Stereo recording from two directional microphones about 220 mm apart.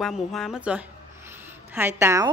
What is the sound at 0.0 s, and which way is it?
A woman's voice, centre (ahead or behind).